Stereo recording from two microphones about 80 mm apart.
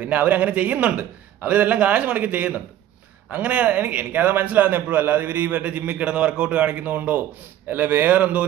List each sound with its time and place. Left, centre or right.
0.0 s a man's voice: centre